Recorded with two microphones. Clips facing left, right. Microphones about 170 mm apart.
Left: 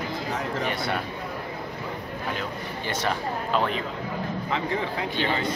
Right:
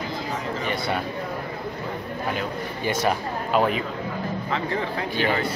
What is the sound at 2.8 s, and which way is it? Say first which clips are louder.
Speech: right 4 dB; 10° right (ahead or behind).